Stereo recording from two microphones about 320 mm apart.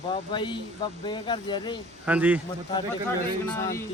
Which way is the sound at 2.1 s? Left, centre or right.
Centre.